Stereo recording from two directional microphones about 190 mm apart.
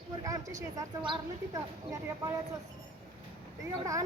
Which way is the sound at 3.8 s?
15° right (ahead or behind).